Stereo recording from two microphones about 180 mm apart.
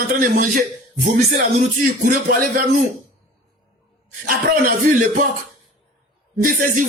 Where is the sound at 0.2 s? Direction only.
50° right (ahead or behind).